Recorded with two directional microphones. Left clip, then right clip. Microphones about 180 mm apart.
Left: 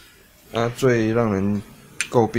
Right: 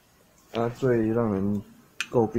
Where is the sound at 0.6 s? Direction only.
15° left (ahead or behind).